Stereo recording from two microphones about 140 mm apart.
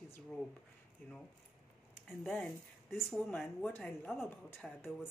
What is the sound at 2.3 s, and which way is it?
Speech, 15° left (ahead or behind).